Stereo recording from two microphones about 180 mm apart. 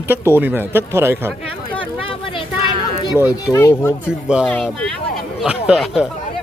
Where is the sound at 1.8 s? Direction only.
30° left (ahead or behind).